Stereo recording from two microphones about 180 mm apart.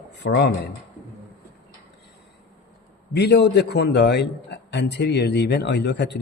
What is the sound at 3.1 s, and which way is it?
A man's voice, 65° left (ahead or behind).